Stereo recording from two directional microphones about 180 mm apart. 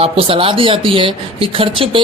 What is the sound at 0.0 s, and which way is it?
A man's voice, 30° right (ahead or behind).